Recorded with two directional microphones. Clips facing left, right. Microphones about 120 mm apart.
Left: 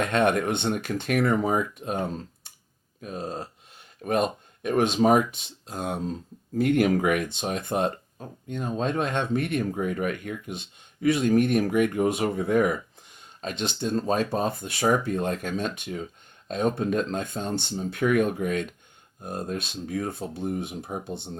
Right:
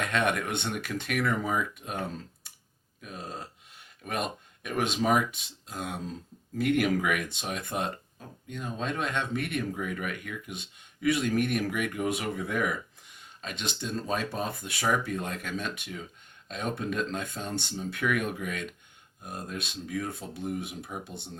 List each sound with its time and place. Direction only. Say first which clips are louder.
0.0 s speech: left 6 dB; 35° left (ahead or behind)